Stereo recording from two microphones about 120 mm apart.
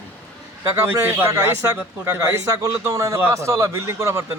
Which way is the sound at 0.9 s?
20° right (ahead or behind).